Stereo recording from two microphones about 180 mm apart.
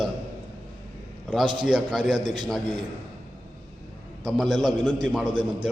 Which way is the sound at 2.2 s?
25° right (ahead or behind).